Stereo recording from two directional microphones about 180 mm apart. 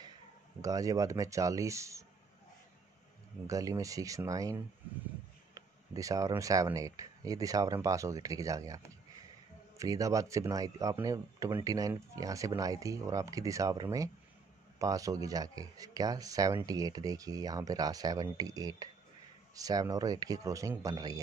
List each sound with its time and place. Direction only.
0.6 s speech: 20° right (ahead or behind)
3.4 s speech: 20° right (ahead or behind)